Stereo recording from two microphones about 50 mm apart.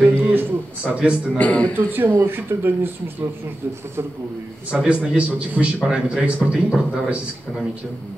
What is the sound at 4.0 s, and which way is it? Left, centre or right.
Speech, right.